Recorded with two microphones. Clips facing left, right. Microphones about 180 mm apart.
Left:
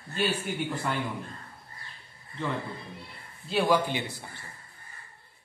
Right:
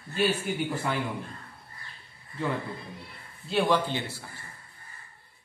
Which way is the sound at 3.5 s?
Centre (ahead or behind).